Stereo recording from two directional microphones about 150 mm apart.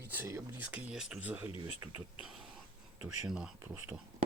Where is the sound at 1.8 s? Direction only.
20° right (ahead or behind).